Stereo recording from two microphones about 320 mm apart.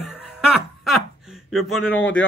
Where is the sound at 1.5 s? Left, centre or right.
Centre.